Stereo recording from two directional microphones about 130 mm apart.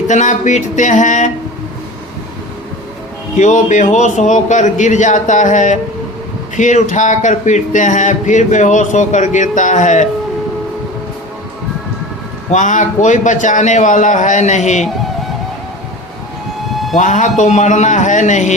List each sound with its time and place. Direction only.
0.1 s speech: 70° left (ahead or behind)
3.3 s speech: 70° left (ahead or behind)
12.5 s speech: 70° left (ahead or behind)
16.7 s siren: centre (ahead or behind)
17.0 s speech: 70° left (ahead or behind)